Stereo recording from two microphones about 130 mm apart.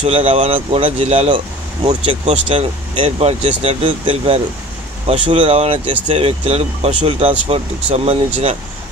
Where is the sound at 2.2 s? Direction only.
55° right (ahead or behind).